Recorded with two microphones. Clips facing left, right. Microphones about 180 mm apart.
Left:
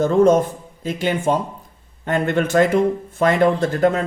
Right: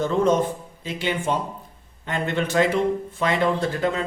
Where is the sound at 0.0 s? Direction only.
45° left (ahead or behind).